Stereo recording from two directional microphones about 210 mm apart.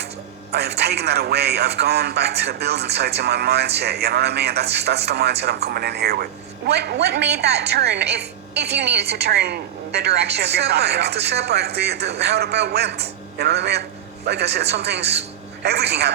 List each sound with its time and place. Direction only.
0.5 s a woman's voice: 50° right (ahead or behind)